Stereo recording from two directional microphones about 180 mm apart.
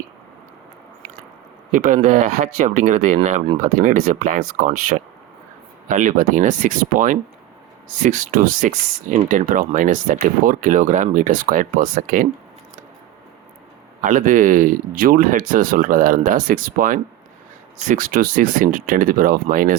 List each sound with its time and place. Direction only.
1.8 s speech: 45° right (ahead or behind)
14.0 s speech: 45° right (ahead or behind)